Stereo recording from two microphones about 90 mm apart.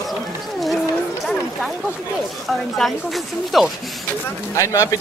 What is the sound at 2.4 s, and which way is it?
Speech, centre (ahead or behind).